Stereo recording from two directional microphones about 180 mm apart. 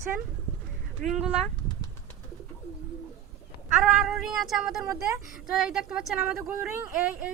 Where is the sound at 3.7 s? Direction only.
5° right (ahead or behind).